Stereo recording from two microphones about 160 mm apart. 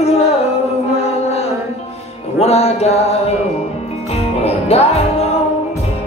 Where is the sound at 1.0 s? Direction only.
40° left (ahead or behind).